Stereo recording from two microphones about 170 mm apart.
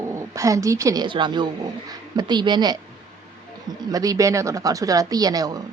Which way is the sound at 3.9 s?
20° right (ahead or behind).